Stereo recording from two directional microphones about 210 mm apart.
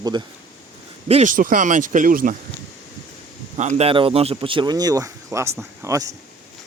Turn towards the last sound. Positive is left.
turn(degrees=-15)  # may be behind; listen again after turning